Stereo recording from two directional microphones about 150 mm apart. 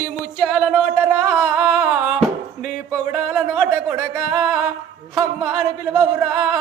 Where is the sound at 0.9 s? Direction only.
10° right (ahead or behind).